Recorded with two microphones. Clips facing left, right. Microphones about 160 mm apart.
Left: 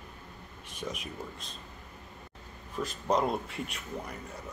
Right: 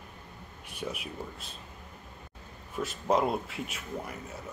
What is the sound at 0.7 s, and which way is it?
Speech, 10° right (ahead or behind).